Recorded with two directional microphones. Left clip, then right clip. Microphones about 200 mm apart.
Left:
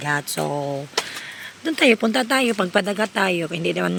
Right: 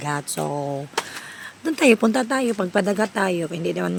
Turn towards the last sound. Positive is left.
turn(degrees=0)  # may be behind; listen again after turning